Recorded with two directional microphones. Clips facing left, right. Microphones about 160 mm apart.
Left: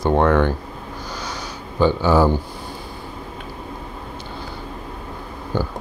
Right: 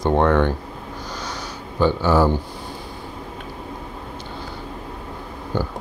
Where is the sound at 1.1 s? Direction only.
10° left (ahead or behind).